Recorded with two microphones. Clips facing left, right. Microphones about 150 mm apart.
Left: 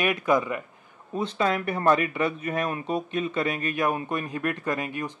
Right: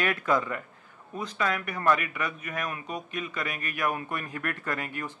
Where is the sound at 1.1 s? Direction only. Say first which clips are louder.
Left 5 dB; 30° left (ahead or behind).